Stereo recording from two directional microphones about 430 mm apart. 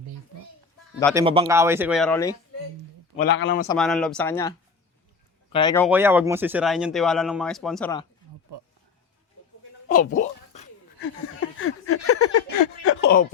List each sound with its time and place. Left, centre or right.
1.1 s speech: centre
3.2 s a man's voice: left
3.7 s speech: centre
8.5 s speech: right
9.9 s speech: centre
11.0 s a sound: left